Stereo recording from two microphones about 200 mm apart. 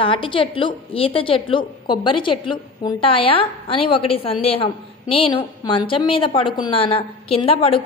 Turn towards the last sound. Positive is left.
turn(degrees=30)  # may be behind; listen again after turning